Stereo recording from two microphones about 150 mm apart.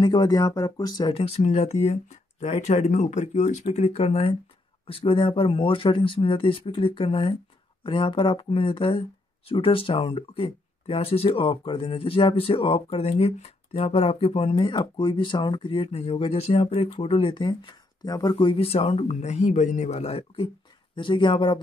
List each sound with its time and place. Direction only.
0.0 s speech: 30° left (ahead or behind)